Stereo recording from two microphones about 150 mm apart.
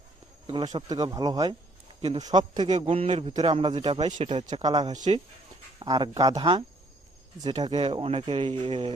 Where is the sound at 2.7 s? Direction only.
40° right (ahead or behind).